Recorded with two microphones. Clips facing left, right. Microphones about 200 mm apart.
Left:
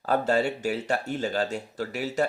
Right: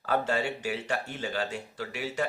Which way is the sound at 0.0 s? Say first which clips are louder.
Left 4 dB; 40° left (ahead or behind).